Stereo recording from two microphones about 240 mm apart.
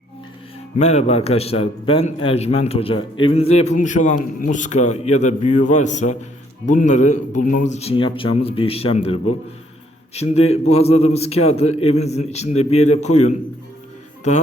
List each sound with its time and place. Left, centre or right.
0.8 s a man's voice: left